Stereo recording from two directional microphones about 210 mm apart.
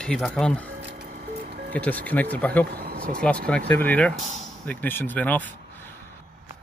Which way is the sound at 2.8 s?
45° right (ahead or behind).